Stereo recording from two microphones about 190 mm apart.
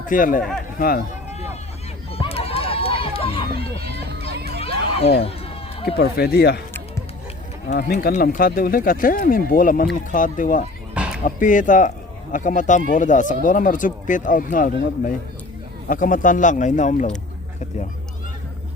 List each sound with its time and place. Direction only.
0.1 s speech: 45° left (ahead or behind)
2.1 s run: 30° left (ahead or behind)
4.3 s music: 60° right (ahead or behind)
4.6 s a sound: 30° left (ahead or behind)
6.0 s speech: 60° left (ahead or behind)
7.7 s speech: 55° left (ahead or behind)
11.0 s bow-wow: 5° right (ahead or behind)
11.3 s speech: 45° left (ahead or behind)